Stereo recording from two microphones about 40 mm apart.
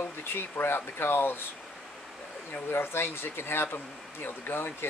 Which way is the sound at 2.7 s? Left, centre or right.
Left.